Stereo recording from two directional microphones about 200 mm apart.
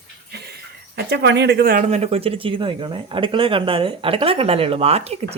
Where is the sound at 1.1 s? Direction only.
60° right (ahead or behind).